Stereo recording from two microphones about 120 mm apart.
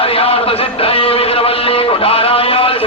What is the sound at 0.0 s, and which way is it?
Music, 50° left (ahead or behind).